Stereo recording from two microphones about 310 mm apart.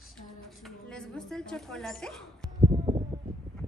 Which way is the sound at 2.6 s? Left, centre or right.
Centre.